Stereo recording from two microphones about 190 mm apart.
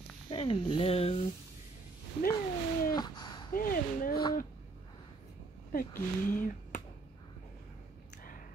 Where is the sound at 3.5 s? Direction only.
50° left (ahead or behind).